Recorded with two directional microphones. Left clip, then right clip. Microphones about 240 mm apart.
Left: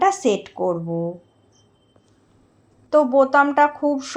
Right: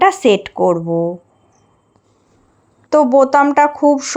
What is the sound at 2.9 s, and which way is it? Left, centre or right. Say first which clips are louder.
A woman's voice: right 5 dB; right.